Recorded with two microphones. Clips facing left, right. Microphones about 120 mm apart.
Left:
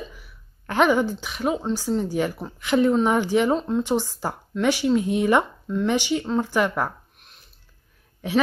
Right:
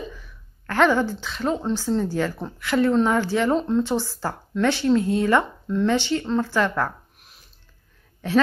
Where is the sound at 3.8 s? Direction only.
15° left (ahead or behind).